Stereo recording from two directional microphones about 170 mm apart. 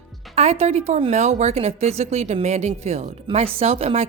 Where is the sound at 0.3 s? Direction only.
35° right (ahead or behind).